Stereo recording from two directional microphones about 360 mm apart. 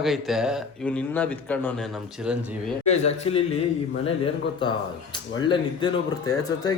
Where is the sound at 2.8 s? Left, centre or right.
Centre.